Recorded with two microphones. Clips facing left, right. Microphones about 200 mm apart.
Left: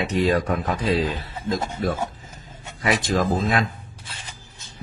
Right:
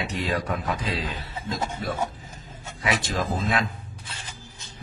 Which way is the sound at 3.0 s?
45° left (ahead or behind).